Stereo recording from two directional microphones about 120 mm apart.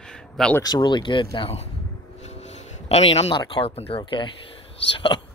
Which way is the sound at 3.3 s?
40° left (ahead or behind).